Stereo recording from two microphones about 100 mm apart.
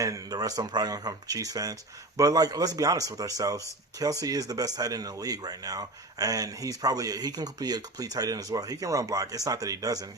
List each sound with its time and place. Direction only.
0.0 s speech: 35° right (ahead or behind)